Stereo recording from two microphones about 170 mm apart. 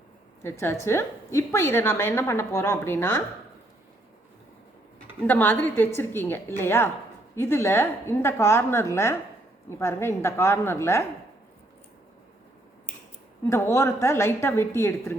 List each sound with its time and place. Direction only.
0.4 s a woman's voice: 15° left (ahead or behind)
5.2 s a woman's voice: 10° left (ahead or behind)
13.5 s a woman's voice: 15° left (ahead or behind)